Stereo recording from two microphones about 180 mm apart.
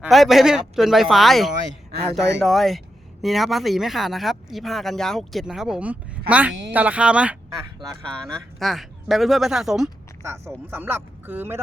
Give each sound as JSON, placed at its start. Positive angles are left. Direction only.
{"t": 0.0, "sound": "speech", "side_deg": 0}
{"t": 10.2, "sound": "speech", "side_deg": -15}